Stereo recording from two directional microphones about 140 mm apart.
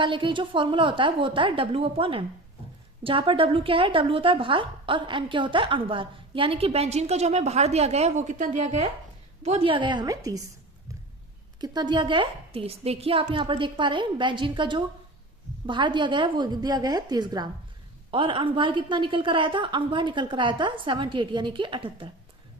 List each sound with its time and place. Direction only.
0.0 s a woman's voice: 35° right (ahead or behind)
11.6 s a woman's voice: 30° right (ahead or behind)